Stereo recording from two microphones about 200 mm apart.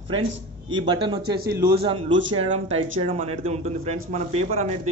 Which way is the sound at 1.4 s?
50° right (ahead or behind).